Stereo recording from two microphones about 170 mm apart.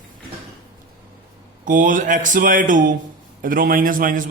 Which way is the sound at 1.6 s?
50° right (ahead or behind).